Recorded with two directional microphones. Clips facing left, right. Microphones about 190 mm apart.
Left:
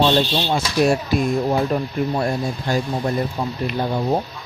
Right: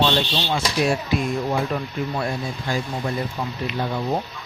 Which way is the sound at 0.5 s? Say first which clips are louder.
Left 4 dB; 40° left (ahead or behind).